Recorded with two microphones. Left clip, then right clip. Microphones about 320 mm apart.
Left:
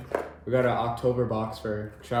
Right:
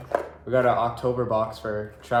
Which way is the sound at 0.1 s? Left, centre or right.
Centre.